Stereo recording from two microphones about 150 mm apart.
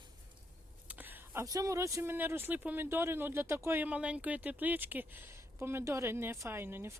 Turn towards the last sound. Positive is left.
turn(degrees=-15)  # may be behind; listen again after turning